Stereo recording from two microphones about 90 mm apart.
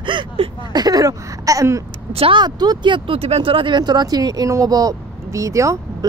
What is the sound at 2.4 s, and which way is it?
Speech, 55° right (ahead or behind).